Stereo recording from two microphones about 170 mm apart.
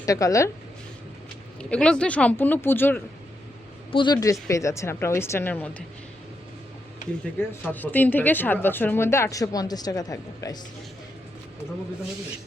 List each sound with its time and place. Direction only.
0.0 s speech: 20° left (ahead or behind)
1.7 s a woman's voice: 5° left (ahead or behind)
3.9 s a woman's voice: 25° left (ahead or behind)
7.3 s a woman's voice: 10° left (ahead or behind)